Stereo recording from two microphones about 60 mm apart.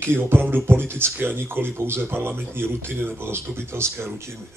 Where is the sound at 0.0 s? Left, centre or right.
Right.